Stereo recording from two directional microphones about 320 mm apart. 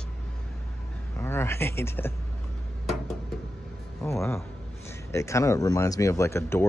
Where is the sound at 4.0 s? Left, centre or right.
Centre.